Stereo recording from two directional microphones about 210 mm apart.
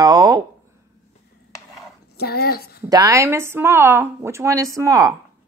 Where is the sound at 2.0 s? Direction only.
50° left (ahead or behind).